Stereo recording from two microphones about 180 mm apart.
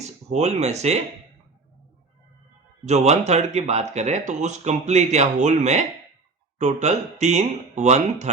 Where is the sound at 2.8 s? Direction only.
40° right (ahead or behind).